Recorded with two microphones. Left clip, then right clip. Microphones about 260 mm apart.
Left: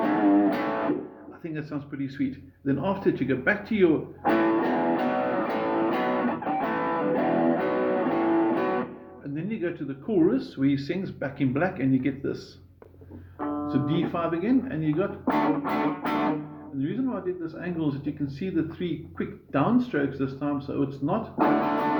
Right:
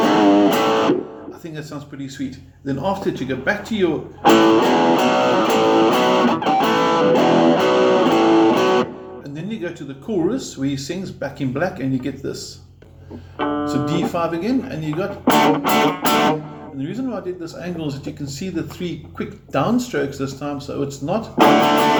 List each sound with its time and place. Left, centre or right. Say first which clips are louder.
0.0 s music: right 8 dB; right
2.2 s speech: right 1 dB; centre
4.2 s music: right 13 dB; right
9.3 s music: right 2 dB; centre
10.2 s speech: right 2 dB; centre
13.4 s speech: right 9 dB; right
14.1 s speech: right 5 dB; centre
15.2 s music: right 14 dB; right
16.8 s speech: right 3 dB; centre
21.3 s speech: right 12 dB; right